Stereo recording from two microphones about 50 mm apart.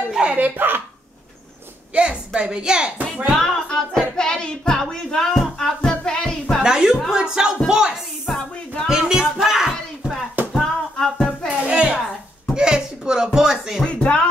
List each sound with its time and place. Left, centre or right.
0.1 s a sound: centre
0.4 s speech: right
2.0 s speech: centre
3.3 s speech: centre
5.8 s music: centre
6.6 s a woman's voice: centre
8.3 s speech: centre
8.8 s speech: centre
9.2 s music: centre
10.5 s music: centre
11.4 s music: right
12.5 s a sound: centre
13.8 s speech: left